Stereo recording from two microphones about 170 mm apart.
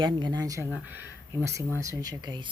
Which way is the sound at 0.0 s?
25° right (ahead or behind).